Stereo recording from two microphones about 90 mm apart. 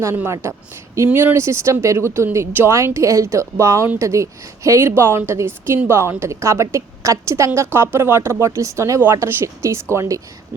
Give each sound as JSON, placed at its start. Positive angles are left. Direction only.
{"t": 0.4, "sound": "a woman's voice", "side_deg": -30}